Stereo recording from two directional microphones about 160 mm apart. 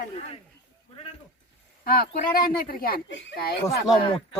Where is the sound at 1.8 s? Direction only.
70° left (ahead or behind).